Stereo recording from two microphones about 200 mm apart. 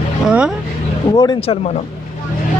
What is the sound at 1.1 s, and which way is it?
Speech, 20° left (ahead or behind).